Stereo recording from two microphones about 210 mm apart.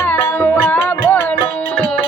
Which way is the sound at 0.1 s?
10° left (ahead or behind).